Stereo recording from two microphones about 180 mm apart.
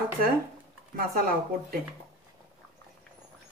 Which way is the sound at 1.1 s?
55° right (ahead or behind).